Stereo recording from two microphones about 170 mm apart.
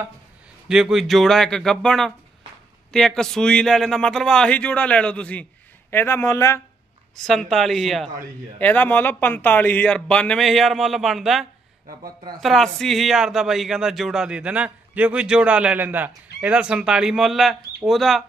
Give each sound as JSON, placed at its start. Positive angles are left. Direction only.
{"t": 0.7, "sound": "a man's voice", "side_deg": -5}
{"t": 7.2, "sound": "a man's voice", "side_deg": 0}
{"t": 12.0, "sound": "speech", "side_deg": -25}
{"t": 12.4, "sound": "a man's voice", "side_deg": 0}